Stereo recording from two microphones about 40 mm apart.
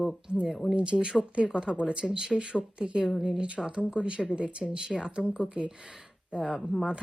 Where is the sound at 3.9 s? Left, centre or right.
Right.